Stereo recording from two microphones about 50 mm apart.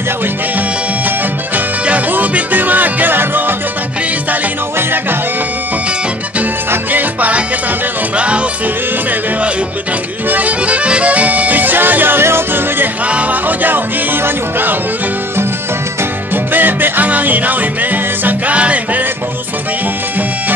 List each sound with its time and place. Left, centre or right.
1.9 s music: right
6.9 s music: right
10.3 s music: right
13.0 s music: right
16.5 s music: right